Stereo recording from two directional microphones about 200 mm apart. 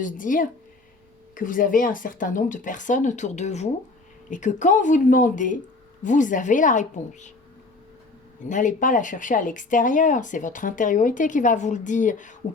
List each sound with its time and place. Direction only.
0.0 s speech: 40° left (ahead or behind)
8.4 s speech: 40° left (ahead or behind)